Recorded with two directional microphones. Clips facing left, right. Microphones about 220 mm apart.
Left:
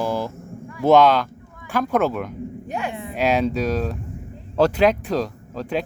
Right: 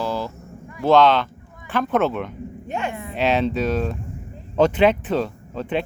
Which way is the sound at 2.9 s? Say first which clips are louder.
Even; 15° left (ahead or behind).